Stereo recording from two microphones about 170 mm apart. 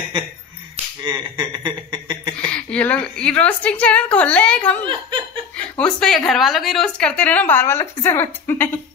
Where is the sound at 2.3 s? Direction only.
5° left (ahead or behind).